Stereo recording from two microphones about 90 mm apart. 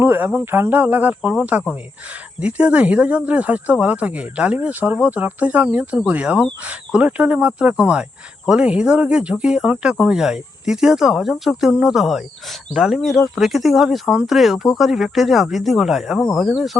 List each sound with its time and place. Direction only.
0.0 s speech: 20° right (ahead or behind); by 16.5 s centre (ahead or behind)